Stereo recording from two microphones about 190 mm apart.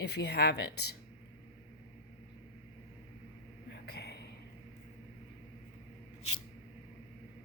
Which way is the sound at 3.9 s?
60° left (ahead or behind).